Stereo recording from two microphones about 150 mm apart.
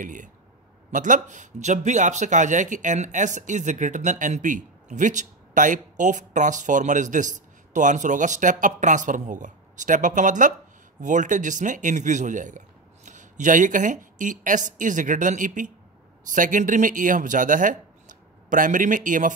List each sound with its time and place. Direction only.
0.0 s speech: 60° right (ahead or behind)